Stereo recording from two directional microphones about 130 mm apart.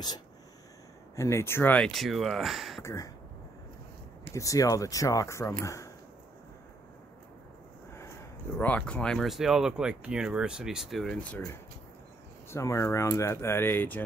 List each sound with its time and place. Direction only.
1.1 s speech: 20° left (ahead or behind)
1.9 s speech: centre (ahead or behind)
2.8 s speech: 20° left (ahead or behind)
4.3 s speech: 25° left (ahead or behind)
8.5 s speech: 10° left (ahead or behind)
11.2 s speech: 15° left (ahead or behind)